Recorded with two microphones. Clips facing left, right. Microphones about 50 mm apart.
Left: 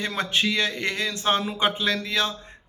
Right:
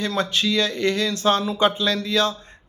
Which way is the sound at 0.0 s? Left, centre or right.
Left.